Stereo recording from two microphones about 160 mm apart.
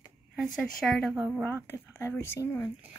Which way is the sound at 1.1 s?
Centre (ahead or behind).